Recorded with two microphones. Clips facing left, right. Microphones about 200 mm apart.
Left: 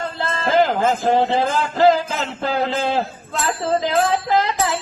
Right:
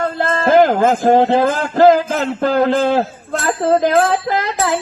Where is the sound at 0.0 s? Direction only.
50° right (ahead or behind).